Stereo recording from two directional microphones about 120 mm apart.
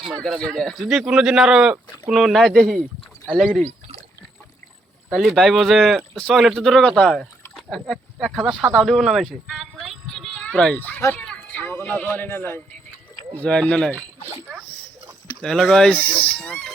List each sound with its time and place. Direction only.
0.2 s speech: 5° left (ahead or behind)
5.1 s speech: centre (ahead or behind)
7.5 s a sound: 5° left (ahead or behind)
10.3 s a child's voice: 10° left (ahead or behind)
11.5 s music: 10° left (ahead or behind)
11.9 s speech: 10° left (ahead or behind)
15.4 s speech: 5° left (ahead or behind)